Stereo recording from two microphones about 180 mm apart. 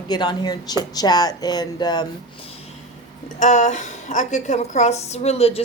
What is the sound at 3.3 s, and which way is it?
A woman's voice, 45° left (ahead or behind).